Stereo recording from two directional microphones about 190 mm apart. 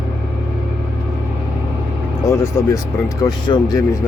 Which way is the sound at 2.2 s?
15° left (ahead or behind).